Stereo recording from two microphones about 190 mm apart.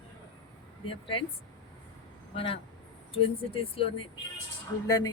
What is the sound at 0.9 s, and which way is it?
Speech, 30° left (ahead or behind).